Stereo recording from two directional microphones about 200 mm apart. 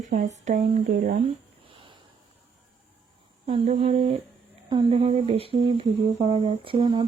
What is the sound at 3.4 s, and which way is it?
Speech, 30° right (ahead or behind).